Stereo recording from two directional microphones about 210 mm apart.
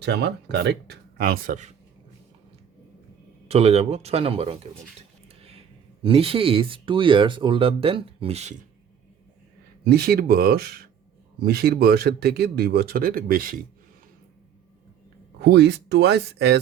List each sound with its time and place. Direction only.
0.0 s speech: 50° right (ahead or behind)
3.5 s speech: 30° right (ahead or behind)
9.8 s speech: 45° right (ahead or behind)
15.4 s speech: 50° right (ahead or behind)